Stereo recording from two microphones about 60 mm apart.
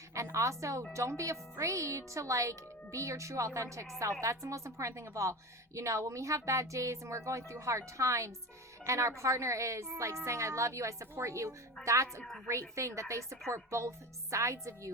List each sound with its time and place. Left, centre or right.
0.1 s a woman's voice: right